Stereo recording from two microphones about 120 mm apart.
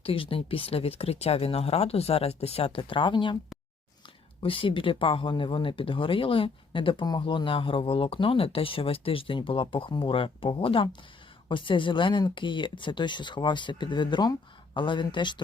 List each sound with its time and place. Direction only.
0.0 s speech: 50° left (ahead or behind)
4.4 s speech: 45° left (ahead or behind)